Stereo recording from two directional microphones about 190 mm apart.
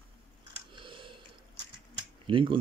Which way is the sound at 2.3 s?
25° right (ahead or behind).